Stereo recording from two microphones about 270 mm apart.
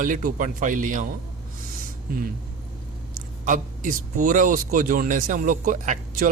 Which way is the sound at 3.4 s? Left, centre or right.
Right.